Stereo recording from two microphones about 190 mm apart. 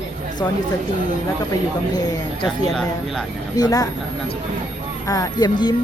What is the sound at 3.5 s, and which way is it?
Speech, 20° left (ahead or behind).